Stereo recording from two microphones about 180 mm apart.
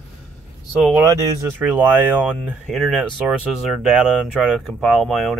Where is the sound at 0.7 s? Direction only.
5° right (ahead or behind).